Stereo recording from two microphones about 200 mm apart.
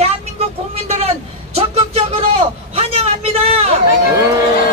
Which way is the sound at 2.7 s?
30° right (ahead or behind).